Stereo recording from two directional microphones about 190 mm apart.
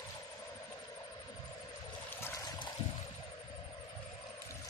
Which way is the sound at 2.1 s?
10° left (ahead or behind).